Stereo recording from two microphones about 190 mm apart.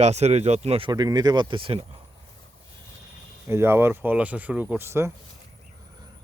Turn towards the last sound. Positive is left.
turn(degrees=-15)  # may be behind; listen again after turning